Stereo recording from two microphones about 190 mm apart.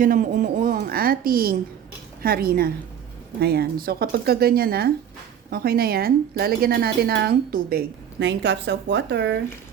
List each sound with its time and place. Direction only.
0.0 s a woman's voice: 45° right (ahead or behind); by 9.4 s 65° right (ahead or behind)